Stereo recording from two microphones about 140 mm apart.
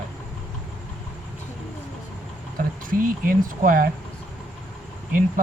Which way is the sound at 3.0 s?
80° right.